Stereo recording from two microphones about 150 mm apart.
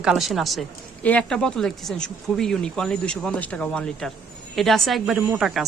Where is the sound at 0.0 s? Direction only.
5° right (ahead or behind).